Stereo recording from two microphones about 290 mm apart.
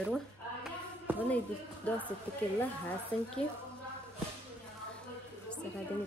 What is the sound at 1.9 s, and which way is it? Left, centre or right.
Speech, centre.